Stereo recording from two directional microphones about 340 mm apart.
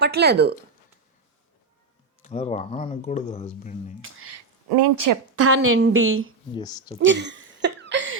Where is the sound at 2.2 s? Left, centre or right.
Centre.